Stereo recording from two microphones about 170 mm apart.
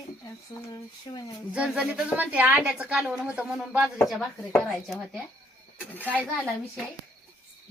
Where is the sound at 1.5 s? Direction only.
5° right (ahead or behind).